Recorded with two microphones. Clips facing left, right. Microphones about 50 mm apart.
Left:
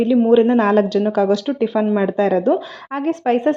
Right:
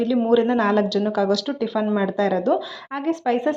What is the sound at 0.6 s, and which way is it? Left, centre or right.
Speech, left.